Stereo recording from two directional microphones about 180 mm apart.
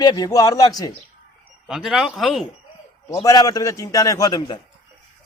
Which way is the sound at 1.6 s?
Centre (ahead or behind).